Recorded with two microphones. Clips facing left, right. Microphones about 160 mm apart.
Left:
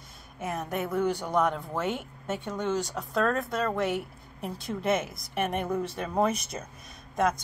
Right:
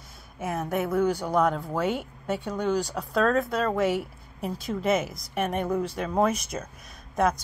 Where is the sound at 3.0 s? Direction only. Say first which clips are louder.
Right 4 dB; centre (ahead or behind).